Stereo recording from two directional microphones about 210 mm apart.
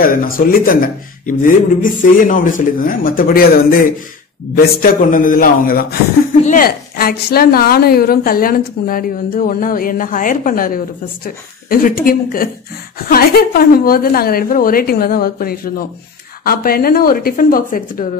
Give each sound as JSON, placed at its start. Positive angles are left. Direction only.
{"t": 0.0, "sound": "a woman's voice", "side_deg": 40}
{"t": 4.8, "sound": "a woman's voice", "side_deg": 40}